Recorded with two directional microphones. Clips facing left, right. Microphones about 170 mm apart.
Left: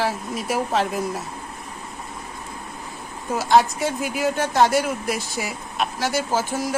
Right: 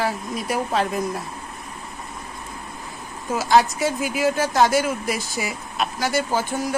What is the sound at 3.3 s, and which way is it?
Speech, centre (ahead or behind).